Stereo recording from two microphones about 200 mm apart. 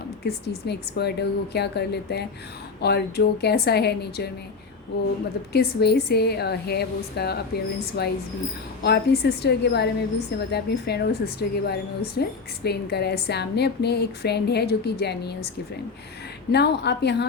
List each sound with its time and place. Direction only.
0.3 s a woman's voice: 55° left (ahead or behind)
5.5 s a woman's voice: 55° left (ahead or behind)
16.5 s a woman's voice: 55° left (ahead or behind)